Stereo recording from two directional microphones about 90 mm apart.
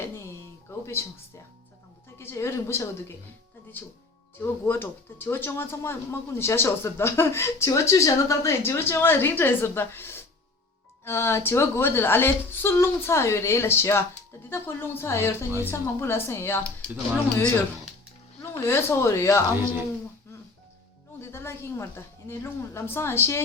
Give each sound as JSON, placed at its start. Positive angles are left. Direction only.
{"t": 0.7, "sound": "a sound", "side_deg": 30}
{"t": 2.1, "sound": "speech", "side_deg": 30}
{"t": 18.6, "sound": "speech", "side_deg": 25}
{"t": 21.2, "sound": "speech", "side_deg": 25}